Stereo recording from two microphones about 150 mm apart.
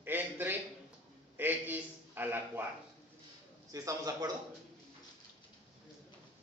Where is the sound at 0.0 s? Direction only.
15° right (ahead or behind).